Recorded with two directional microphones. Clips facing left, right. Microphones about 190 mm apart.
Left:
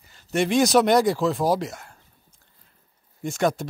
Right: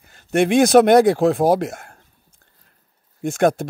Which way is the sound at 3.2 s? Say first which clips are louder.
Right 6 dB; 50° right (ahead or behind).